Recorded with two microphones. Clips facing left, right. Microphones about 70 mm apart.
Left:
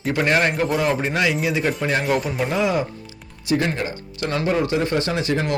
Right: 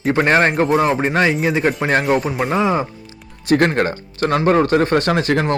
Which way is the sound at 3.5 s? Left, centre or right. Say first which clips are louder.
Right 7 dB; right.